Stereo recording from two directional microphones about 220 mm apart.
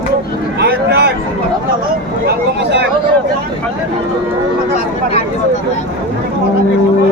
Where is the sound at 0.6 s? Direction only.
50° right (ahead or behind).